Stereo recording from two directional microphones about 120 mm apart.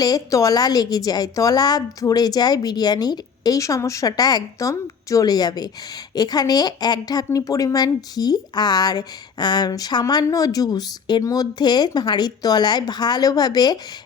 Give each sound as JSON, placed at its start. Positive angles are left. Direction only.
{"t": 0.0, "sound": "speech", "side_deg": 30}